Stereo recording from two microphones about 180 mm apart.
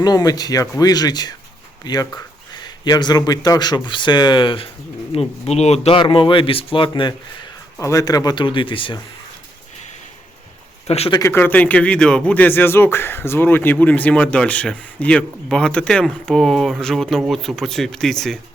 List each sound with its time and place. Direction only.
0.0 s speech: 20° left (ahead or behind)
10.8 s speech: 35° left (ahead or behind)
11.2 s speech: 10° left (ahead or behind)